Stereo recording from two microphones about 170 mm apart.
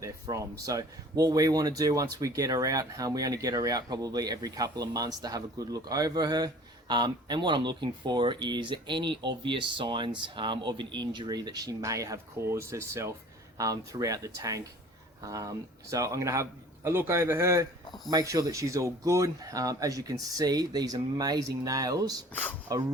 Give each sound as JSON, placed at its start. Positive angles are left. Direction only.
{"t": 0.0, "sound": "a man's voice", "side_deg": -20}
{"t": 22.3, "sound": "speech", "side_deg": 10}